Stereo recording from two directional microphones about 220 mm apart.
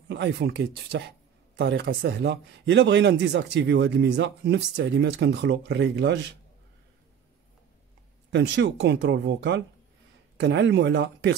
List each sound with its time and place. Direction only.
0.1 s a man's voice: 50° right (ahead or behind)
8.3 s a man's voice: 50° right (ahead or behind)